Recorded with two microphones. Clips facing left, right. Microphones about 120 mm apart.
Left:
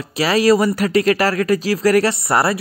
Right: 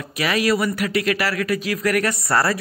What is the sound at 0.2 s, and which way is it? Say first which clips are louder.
Speech: left 6 dB; 35° left (ahead or behind).